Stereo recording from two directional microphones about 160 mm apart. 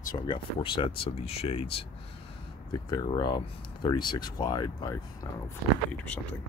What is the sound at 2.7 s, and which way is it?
Speech, 25° left (ahead or behind).